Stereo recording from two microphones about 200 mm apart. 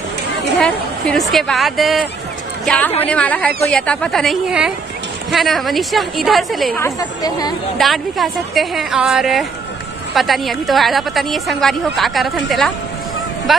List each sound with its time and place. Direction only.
0.6 s a woman's voice: 5° left (ahead or behind)
6.8 s speech: 20° left (ahead or behind)
7.7 s a woman's voice: centre (ahead or behind)